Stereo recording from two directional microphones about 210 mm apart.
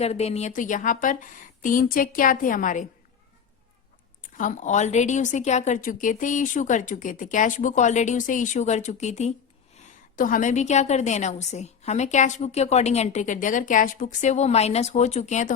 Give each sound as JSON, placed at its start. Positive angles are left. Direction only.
{"t": 0.0, "sound": "a woman's voice", "side_deg": 30}
{"t": 4.2, "sound": "a woman's voice", "side_deg": 40}